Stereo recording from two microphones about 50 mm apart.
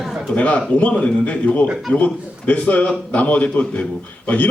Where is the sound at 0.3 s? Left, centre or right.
Left.